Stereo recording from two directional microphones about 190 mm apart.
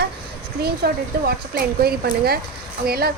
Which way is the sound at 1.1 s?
55° right (ahead or behind).